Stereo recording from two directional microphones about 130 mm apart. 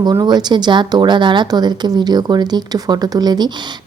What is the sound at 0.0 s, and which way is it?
Speech, 30° right (ahead or behind).